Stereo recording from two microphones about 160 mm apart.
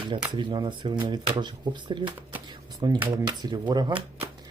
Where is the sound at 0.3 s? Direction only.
30° right (ahead or behind).